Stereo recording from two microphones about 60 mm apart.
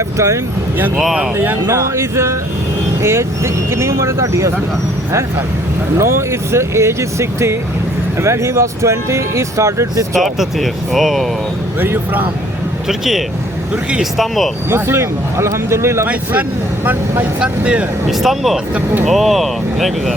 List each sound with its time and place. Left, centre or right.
0.9 s speech: centre
1.6 s speech: right
6.0 s speech: right
10.2 s speech: centre
11.8 s speech: right
12.9 s speech: centre
14.7 s speech: right
16.8 s speech: right
17.4 s speech: centre
18.1 s speech: centre